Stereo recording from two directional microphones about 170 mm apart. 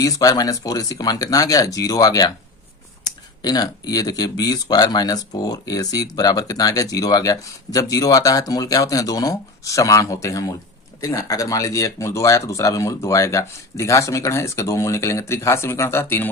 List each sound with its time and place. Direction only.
0.0 s speech: 20° left (ahead or behind)
3.4 s speech: 20° left (ahead or behind)